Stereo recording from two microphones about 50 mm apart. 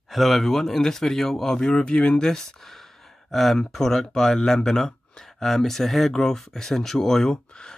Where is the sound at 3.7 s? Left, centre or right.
Centre.